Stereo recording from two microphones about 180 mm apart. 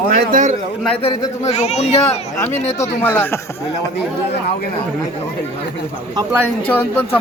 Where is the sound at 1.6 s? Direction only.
40° left (ahead or behind).